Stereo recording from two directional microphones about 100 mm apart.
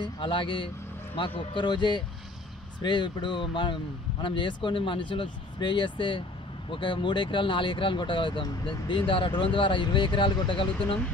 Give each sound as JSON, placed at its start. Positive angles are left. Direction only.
{"t": 0.0, "sound": "speech", "side_deg": 55}